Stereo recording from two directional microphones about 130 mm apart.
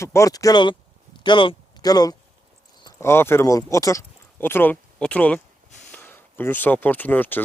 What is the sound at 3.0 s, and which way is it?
Speech, 20° left (ahead or behind).